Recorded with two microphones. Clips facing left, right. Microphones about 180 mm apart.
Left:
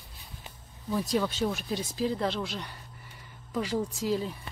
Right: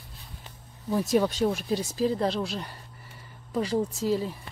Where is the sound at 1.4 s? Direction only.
30° right (ahead or behind).